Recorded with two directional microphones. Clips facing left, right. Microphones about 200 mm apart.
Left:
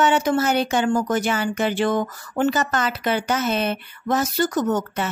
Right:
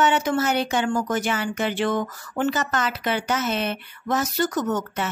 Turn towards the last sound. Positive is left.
turn(degrees=30)  # may be behind; listen again after turning